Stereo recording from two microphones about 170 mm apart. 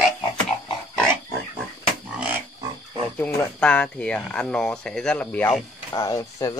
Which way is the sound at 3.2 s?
10° left (ahead or behind).